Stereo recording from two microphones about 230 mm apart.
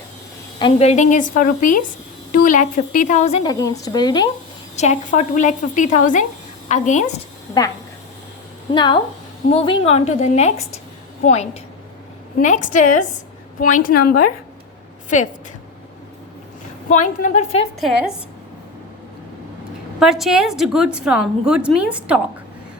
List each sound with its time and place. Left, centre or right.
0.6 s a woman's voice: left
3.4 s speech: centre
4.8 s a woman's voice: left
8.7 s a woman's voice: centre
12.4 s a woman's voice: left
16.9 s a woman's voice: left
17.7 s a woman's voice: centre
20.0 s a woman's voice: centre